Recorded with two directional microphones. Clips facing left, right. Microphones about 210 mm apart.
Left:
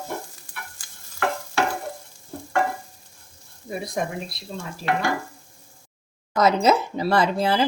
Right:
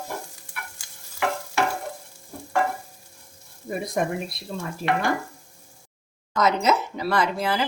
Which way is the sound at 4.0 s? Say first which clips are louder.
Right 2 dB; 50° right (ahead or behind).